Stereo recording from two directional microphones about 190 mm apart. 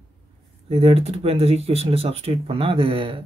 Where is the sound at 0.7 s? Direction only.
30° right (ahead or behind).